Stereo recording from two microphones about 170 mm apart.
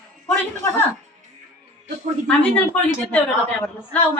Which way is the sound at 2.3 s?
10° left (ahead or behind).